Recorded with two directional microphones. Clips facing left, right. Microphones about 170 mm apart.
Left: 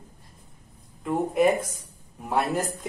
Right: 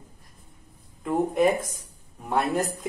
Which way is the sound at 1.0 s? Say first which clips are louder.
Even; centre (ahead or behind).